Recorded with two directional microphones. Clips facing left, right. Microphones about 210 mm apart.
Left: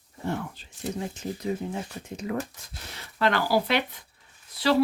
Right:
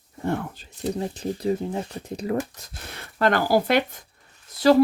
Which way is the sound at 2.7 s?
55° right (ahead or behind).